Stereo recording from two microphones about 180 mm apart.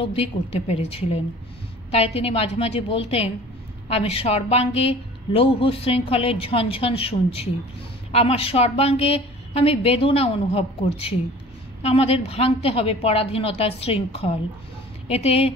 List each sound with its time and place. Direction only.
0.0 s a woman's voice: 30° left (ahead or behind)
11.8 s a woman's voice: 35° left (ahead or behind)